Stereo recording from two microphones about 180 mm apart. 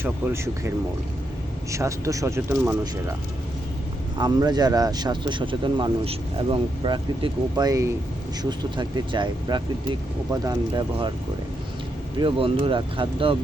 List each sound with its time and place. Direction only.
0.0 s speech: 15° right (ahead or behind)
1.7 s speech: 15° right (ahead or behind)
4.2 s speech: 20° right (ahead or behind)
12.2 s speech: 30° right (ahead or behind)